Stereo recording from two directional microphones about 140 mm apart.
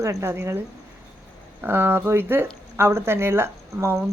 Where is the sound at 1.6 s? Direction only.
15° right (ahead or behind).